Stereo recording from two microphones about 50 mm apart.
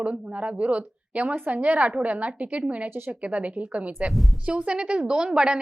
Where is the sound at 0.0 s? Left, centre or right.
Right.